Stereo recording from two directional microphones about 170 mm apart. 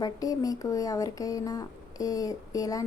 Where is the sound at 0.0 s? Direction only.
20° left (ahead or behind).